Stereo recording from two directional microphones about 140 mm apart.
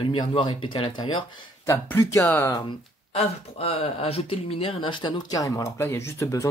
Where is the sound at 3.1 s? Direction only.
45° left (ahead or behind).